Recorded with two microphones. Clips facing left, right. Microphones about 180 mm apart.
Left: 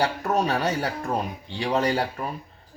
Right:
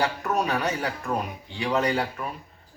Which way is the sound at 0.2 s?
30° left (ahead or behind).